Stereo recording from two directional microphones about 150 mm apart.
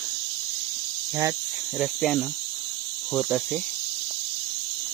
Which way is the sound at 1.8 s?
Centre (ahead or behind).